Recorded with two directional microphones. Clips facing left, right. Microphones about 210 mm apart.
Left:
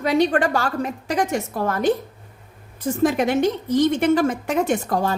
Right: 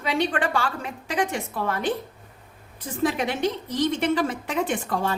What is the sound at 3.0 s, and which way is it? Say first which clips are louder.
A woman's voice: left 5 dB; 45° left (ahead or behind).